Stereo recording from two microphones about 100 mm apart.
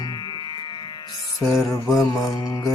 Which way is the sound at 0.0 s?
45° left (ahead or behind).